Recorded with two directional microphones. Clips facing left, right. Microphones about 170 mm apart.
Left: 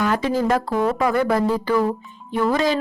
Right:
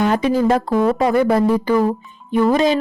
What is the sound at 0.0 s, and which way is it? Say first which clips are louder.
Speech: right 4 dB; 20° right (ahead or behind).